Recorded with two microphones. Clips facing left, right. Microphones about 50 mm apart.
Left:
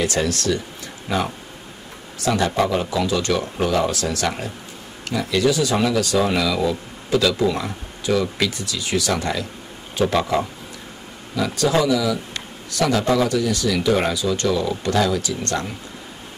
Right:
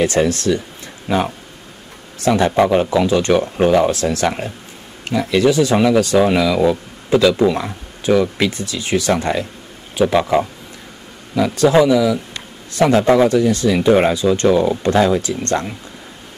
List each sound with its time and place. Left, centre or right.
0.0 s speech: right
9.9 s speech: centre
11.4 s speech: right
12.7 s speech: right